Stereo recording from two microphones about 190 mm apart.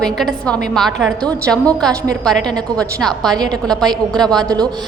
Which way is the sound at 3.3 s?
20° right (ahead or behind).